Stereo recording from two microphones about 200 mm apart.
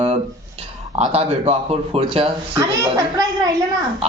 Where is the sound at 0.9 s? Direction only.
30° right (ahead or behind).